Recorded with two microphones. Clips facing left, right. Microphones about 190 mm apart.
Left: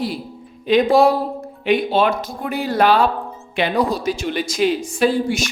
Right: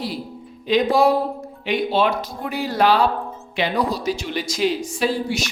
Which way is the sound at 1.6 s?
50° left (ahead or behind).